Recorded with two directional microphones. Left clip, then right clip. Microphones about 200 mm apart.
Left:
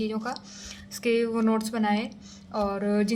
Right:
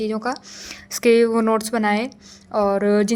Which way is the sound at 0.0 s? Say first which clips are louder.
Right 7 dB; 45° right (ahead or behind).